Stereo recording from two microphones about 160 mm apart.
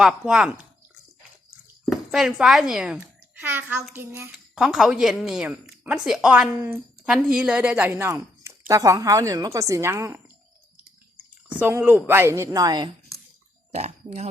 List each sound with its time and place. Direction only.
0.0 s a woman's voice: 5° right (ahead or behind)
1.8 s a woman's voice: centre (ahead or behind)
4.5 s a woman's voice: centre (ahead or behind)
11.6 s a woman's voice: 15° right (ahead or behind)
13.7 s speech: 40° right (ahead or behind)